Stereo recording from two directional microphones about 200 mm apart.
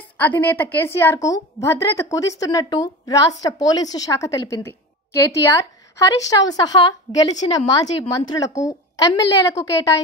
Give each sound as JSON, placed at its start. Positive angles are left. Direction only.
{"t": 0.2, "sound": "a woman's voice", "side_deg": 10}